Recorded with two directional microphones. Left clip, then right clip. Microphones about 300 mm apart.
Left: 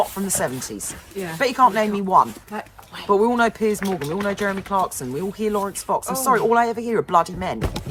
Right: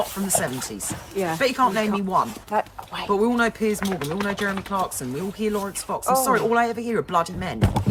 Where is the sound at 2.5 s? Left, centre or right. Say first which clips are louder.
Right 8 dB; right.